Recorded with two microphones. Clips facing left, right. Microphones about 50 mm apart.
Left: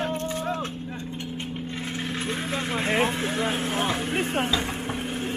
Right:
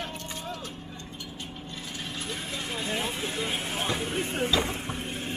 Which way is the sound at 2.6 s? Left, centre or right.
Left.